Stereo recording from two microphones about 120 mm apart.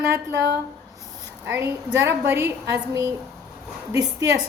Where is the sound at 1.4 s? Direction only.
20° right (ahead or behind).